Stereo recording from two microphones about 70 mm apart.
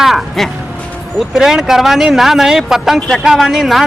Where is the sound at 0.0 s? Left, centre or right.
Centre.